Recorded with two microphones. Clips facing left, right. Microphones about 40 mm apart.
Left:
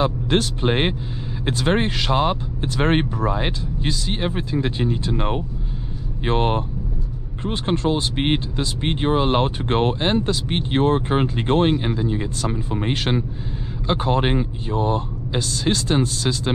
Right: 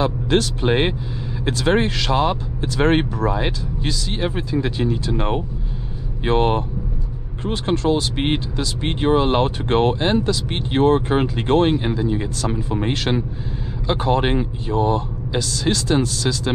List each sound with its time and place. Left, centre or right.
0.0 s speech: left
6.3 s speech: centre
15.4 s speech: left